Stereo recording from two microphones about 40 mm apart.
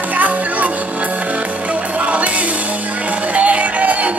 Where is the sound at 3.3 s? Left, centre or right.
Right.